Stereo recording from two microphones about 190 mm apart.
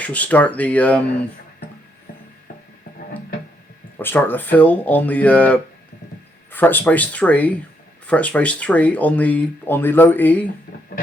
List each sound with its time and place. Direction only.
0.0 s speech: 5° left (ahead or behind)
3.9 s speech: 10° left (ahead or behind)
10.7 s guitar: 50° left (ahead or behind)